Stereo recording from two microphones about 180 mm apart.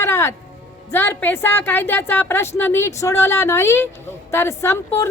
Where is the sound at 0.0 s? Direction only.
15° left (ahead or behind).